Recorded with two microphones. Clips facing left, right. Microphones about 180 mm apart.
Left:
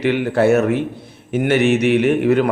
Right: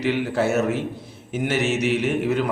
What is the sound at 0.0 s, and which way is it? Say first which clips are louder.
A man's voice: left 6 dB; 60° left (ahead or behind).